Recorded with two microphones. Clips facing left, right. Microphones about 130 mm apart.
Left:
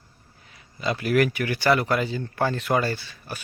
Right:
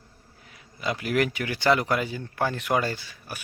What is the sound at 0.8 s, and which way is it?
Speech, 15° right (ahead or behind).